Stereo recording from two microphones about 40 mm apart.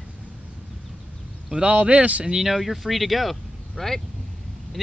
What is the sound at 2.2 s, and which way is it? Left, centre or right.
Speech, centre.